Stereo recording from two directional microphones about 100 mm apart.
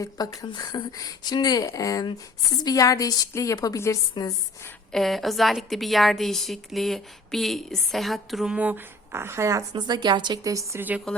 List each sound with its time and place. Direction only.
0.0 s speech: 40° left (ahead or behind)
4.9 s a woman's voice: centre (ahead or behind)
8.5 s speech: 15° right (ahead or behind)
9.7 s speech: 45° right (ahead or behind)
10.8 s a woman's voice: 15° right (ahead or behind)